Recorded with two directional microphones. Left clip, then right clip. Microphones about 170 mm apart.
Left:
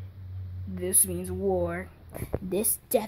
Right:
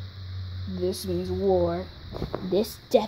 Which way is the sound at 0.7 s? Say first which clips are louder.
Right 4 dB; centre (ahead or behind).